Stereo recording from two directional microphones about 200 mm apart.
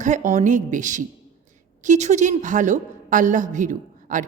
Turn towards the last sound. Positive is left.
turn(degrees=-40)  # may be behind; listen again after turning